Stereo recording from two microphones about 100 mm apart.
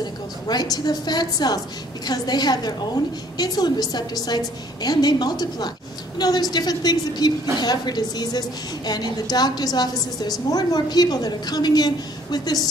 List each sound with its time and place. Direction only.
0.5 s a woman's voice: 45° left (ahead or behind)